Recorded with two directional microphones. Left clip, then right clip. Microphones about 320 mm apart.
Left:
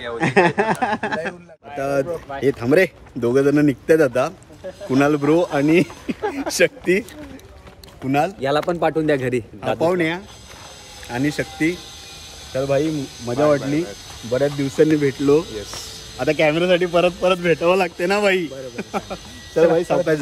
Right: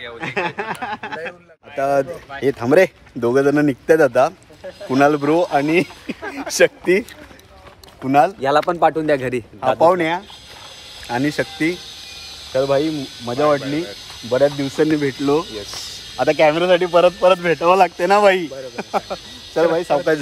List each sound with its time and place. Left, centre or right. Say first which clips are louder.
0.0 s speech: left 6 dB; centre
1.8 s speech: right 3 dB; centre
8.1 s speech: right 5 dB; centre